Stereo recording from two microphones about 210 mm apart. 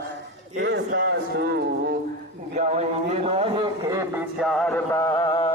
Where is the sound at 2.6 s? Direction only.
30° right (ahead or behind); by 4.2 s 15° right (ahead or behind).